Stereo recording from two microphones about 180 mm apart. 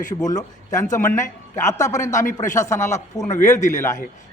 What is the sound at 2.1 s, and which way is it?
Speech, 45° left (ahead or behind).